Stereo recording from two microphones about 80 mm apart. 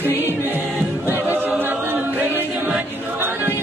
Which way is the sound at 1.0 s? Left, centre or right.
Right.